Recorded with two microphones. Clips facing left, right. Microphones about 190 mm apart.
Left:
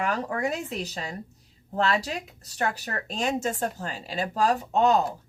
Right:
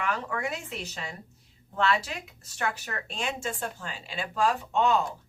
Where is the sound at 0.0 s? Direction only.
40° left (ahead or behind).